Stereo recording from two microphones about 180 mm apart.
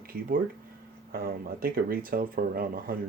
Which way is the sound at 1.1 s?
55° right (ahead or behind).